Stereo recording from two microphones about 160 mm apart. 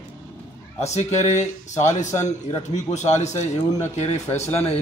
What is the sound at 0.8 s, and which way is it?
Speech, 45° left (ahead or behind).